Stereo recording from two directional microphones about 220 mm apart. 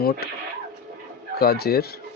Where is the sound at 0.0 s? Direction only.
45° left (ahead or behind).